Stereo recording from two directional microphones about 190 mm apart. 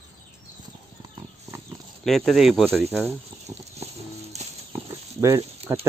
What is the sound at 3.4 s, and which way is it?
Patter, 35° right (ahead or behind).